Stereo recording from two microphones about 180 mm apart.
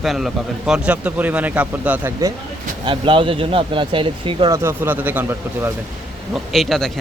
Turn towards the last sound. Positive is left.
turn(degrees=0)  # may be behind; listen again after turning